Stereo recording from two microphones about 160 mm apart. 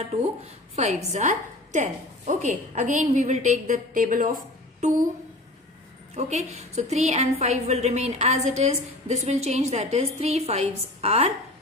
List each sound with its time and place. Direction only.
0.7 s a woman's voice: 45° right (ahead or behind)
6.1 s a woman's voice: 45° right (ahead or behind)